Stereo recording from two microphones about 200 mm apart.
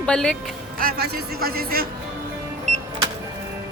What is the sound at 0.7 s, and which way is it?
A man's voice, 50° right (ahead or behind).